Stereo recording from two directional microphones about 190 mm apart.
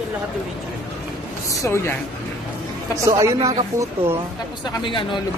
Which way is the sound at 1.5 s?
15° left (ahead or behind).